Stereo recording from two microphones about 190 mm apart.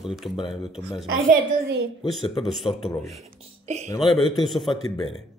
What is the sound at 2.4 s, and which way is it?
Speech, centre (ahead or behind).